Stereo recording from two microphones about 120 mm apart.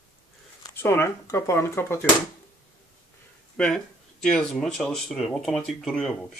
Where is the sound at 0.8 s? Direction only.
20° left (ahead or behind).